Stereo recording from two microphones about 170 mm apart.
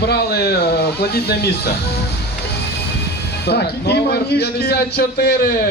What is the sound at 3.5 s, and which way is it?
A man's voice, 75° left (ahead or behind).